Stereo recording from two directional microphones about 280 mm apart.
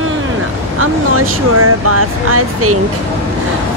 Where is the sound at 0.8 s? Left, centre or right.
Right.